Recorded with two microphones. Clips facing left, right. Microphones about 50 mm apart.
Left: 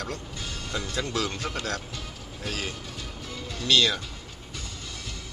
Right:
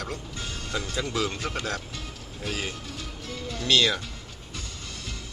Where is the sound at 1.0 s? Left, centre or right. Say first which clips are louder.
Right 1 dB; centre.